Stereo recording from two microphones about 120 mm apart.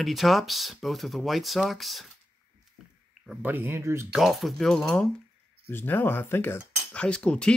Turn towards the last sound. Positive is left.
turn(degrees=5)  # may be behind; listen again after turning